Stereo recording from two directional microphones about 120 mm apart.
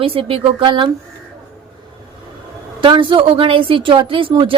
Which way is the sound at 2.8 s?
45° right (ahead or behind).